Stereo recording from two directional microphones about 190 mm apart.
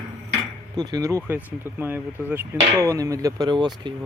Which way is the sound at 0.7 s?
20° right (ahead or behind).